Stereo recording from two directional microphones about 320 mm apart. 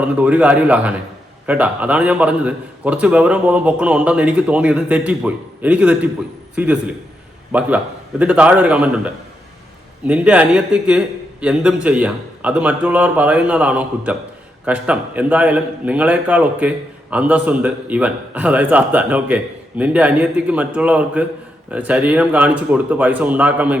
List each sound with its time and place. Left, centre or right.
0.0 s a man's voice: centre